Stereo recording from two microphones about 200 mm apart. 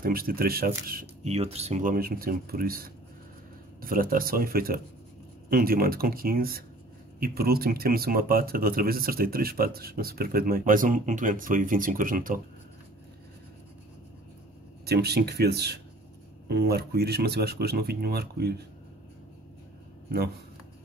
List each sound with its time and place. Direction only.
0.0 s speech: 45° right (ahead or behind)
1.2 s speech: 30° right (ahead or behind)
14.9 s speech: 55° right (ahead or behind)